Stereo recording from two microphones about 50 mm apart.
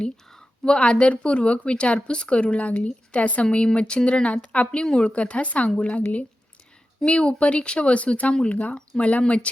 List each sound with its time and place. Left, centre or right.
0.0 s a woman's voice: centre
7.0 s a woman's voice: left